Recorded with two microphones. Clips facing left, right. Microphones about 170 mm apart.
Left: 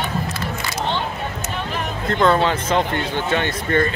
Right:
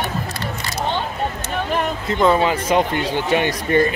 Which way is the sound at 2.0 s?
5° right (ahead or behind).